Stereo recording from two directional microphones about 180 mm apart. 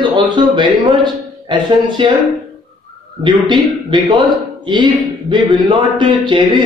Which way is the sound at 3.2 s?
25° right (ahead or behind).